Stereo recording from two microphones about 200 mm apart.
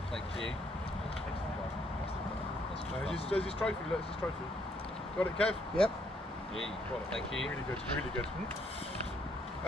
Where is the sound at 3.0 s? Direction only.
30° left (ahead or behind).